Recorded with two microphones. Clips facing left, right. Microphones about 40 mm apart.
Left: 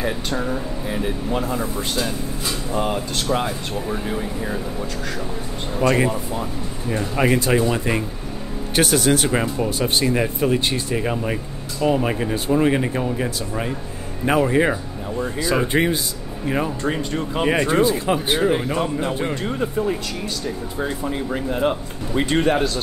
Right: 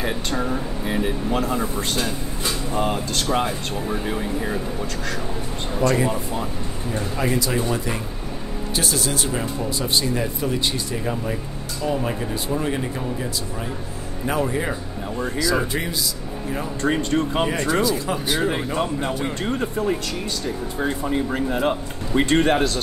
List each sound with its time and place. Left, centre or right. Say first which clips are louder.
0.0 s speech: left 1 dB; centre
5.8 s speech: left 2 dB; left
6.0 s speech: left 1 dB; centre
7.2 s speech: left 6 dB; left
8.7 s a man's voice: left 7 dB; left
9.3 s speech: left 4 dB; left
15.0 s speech: left 2 dB; centre
15.7 s speech: left 6 dB; left
16.8 s speech: right 2 dB; centre
17.5 s speech: left 3 dB; left
18.8 s speech: left 1 dB; centre